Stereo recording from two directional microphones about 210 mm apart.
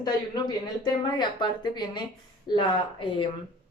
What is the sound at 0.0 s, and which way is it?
Speech, 20° left (ahead or behind).